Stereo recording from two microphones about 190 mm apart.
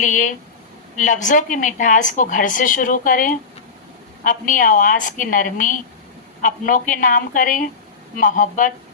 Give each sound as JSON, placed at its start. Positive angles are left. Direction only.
{"t": 0.0, "sound": "a woman's voice", "side_deg": 45}